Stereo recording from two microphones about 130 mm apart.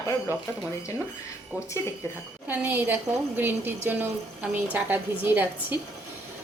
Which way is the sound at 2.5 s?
15° right (ahead or behind).